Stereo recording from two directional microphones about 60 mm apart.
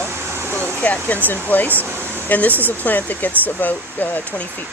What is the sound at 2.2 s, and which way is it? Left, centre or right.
Speech, left.